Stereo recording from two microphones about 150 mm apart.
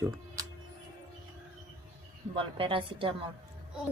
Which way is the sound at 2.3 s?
35° right (ahead or behind).